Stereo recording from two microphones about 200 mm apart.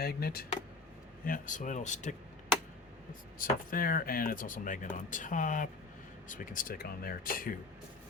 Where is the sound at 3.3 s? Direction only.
45° left (ahead or behind).